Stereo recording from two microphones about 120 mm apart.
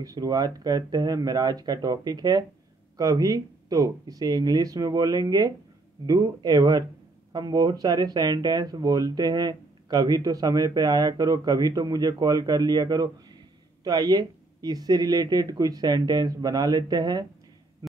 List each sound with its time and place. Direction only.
0.0 s speech: 30° right (ahead or behind)